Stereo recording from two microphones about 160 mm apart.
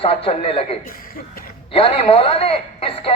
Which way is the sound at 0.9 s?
60° left (ahead or behind).